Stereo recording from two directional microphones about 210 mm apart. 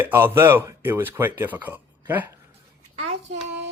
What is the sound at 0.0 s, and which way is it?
Speech, 10° right (ahead or behind).